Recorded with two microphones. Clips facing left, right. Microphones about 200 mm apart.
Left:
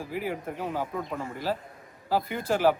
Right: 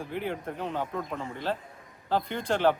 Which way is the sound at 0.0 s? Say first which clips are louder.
Left 1 dB; 5° left (ahead or behind).